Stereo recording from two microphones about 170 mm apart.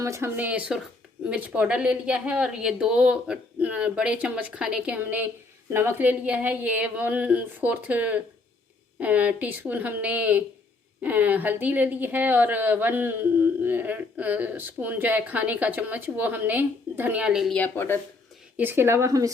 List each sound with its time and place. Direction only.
0.0 s a woman's voice: 15° right (ahead or behind); by 18.0 s 15° left (ahead or behind)
18.5 s a woman's voice: 10° right (ahead or behind)